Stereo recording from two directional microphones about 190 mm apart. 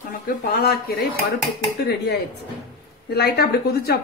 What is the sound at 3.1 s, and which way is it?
Speech, 55° left (ahead or behind).